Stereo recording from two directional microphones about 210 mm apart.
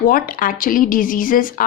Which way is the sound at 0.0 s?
45° left (ahead or behind).